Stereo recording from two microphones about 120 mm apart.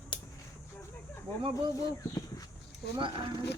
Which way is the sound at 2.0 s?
30° left (ahead or behind).